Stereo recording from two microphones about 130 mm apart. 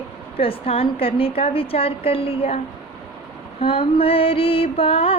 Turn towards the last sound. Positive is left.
turn(degrees=45)  # may be behind; listen again after turning